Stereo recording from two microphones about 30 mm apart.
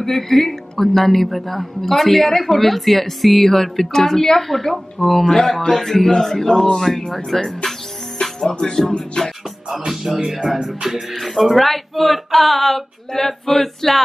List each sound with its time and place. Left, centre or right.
0.0 s speech: centre
5.3 s speech: centre
8.2 s music: centre
9.7 s music: centre
10.3 s speech: centre
10.6 s music: centre
11.1 s speech: centre